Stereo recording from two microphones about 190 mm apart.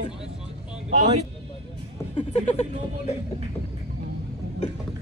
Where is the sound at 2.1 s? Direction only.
35° left (ahead or behind).